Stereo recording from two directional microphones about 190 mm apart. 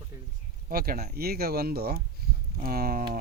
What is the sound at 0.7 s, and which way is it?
Speech, 50° right (ahead or behind).